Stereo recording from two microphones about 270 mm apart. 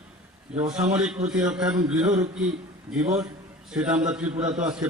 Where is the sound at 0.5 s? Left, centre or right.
Right.